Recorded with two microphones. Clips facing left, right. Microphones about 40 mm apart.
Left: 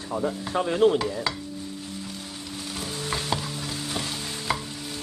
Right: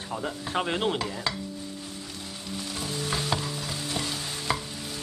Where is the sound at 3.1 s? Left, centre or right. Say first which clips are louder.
Left 1 dB; centre.